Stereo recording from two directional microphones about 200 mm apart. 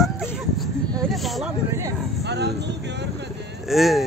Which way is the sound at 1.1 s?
Centre (ahead or behind).